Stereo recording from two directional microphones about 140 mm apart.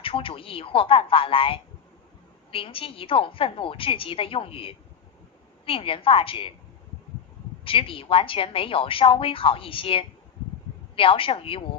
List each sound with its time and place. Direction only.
0.0 s a woman's voice: 40° left (ahead or behind)
7.6 s a woman's voice: 40° left (ahead or behind)